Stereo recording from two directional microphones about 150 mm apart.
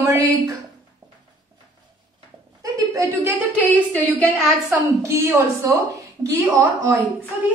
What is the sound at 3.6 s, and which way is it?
Speech, 10° left (ahead or behind).